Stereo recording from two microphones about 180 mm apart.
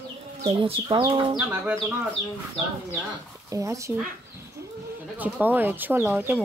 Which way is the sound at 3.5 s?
15° right (ahead or behind).